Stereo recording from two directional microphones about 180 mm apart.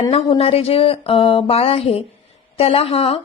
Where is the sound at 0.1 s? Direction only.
35° left (ahead or behind).